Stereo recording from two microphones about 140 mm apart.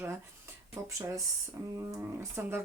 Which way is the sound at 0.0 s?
20° right (ahead or behind).